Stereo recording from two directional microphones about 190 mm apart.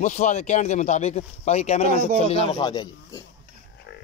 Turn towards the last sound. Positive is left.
turn(degrees=20)  # may be behind; listen again after turning